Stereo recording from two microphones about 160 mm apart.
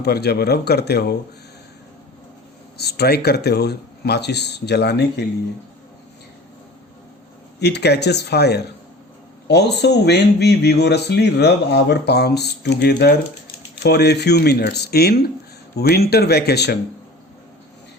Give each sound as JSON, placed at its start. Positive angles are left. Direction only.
{"t": 0.0, "sound": "speech", "side_deg": 90}
{"t": 2.7, "sound": "speech", "side_deg": 85}
{"t": 7.6, "sound": "speech", "side_deg": 90}